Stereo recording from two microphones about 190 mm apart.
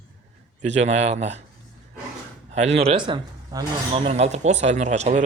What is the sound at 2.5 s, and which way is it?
A man's voice, 35° right (ahead or behind).